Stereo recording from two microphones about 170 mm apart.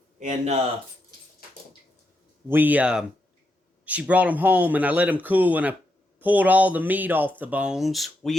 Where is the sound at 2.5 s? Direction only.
10° right (ahead or behind).